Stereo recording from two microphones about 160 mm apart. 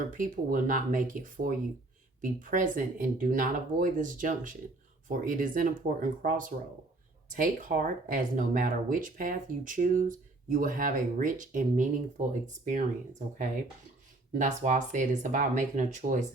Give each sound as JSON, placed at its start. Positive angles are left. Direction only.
{"t": 0.1, "sound": "speech", "side_deg": -55}